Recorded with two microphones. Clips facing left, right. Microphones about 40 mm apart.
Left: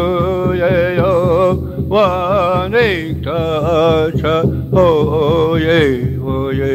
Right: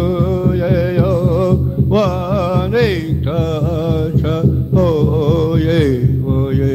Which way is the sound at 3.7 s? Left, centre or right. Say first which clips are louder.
Left 6 dB; left.